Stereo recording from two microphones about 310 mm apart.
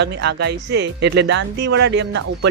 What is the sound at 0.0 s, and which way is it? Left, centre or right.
Speech, right.